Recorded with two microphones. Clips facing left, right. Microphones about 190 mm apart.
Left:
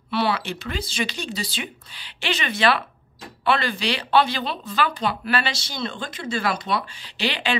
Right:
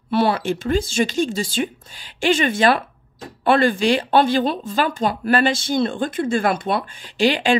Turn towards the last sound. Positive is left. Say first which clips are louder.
# right 8 dB
turn(degrees=-45)  # may be behind; listen again after turning